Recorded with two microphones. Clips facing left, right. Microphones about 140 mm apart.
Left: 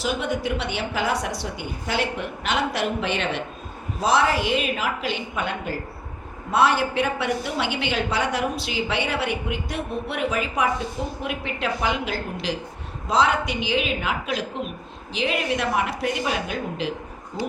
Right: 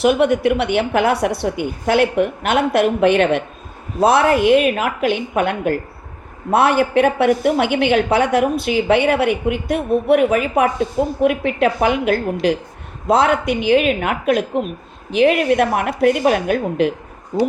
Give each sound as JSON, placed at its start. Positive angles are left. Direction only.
{"t": 0.0, "sound": "a woman's voice", "side_deg": -65}